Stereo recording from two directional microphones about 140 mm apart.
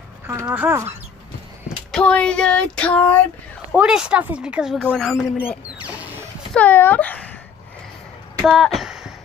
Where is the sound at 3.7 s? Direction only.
5° right (ahead or behind).